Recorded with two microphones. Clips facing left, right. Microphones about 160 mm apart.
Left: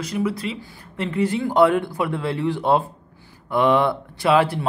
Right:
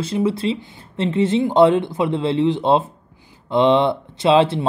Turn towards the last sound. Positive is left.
turn(degrees=-25)  # may be behind; listen again after turning